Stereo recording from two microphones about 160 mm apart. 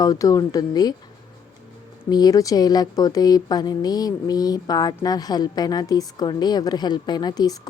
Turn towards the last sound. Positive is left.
turn(degrees=25)  # may be behind; listen again after turning